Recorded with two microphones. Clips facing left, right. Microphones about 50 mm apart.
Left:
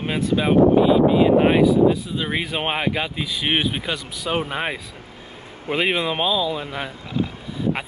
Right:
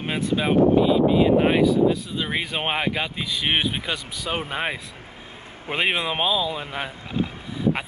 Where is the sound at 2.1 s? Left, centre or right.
Centre.